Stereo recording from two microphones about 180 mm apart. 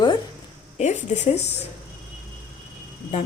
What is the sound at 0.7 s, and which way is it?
Speech, 40° left (ahead or behind).